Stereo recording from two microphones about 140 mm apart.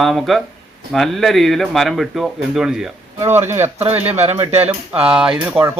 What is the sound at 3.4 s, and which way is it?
Speech, 15° right (ahead or behind).